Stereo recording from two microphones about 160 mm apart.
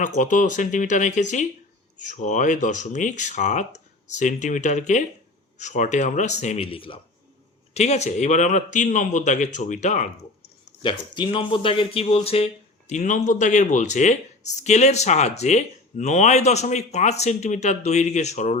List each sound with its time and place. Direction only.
0.0 s speech: 55° left (ahead or behind)
10.8 s speech: 30° left (ahead or behind); by 18.6 s 45° left (ahead or behind)